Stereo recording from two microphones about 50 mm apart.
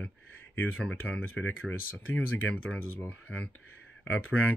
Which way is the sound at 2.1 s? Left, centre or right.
Left.